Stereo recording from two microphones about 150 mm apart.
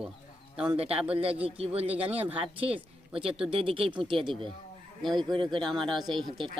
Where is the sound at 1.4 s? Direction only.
40° right (ahead or behind).